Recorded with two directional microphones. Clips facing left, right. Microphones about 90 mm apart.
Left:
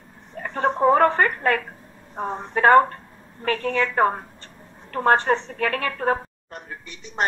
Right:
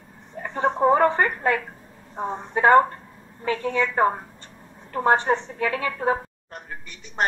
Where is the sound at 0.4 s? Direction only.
15° right (ahead or behind).